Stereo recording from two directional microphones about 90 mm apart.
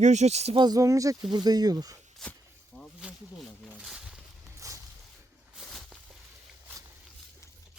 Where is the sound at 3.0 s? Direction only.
10° right (ahead or behind).